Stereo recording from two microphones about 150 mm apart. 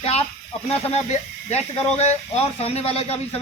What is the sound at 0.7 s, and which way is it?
A woman's voice, 45° left (ahead or behind).